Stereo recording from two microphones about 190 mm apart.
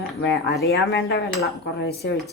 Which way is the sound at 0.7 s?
60° left (ahead or behind).